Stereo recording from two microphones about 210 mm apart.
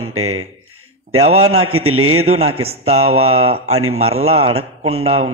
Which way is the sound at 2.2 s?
30° right (ahead or behind).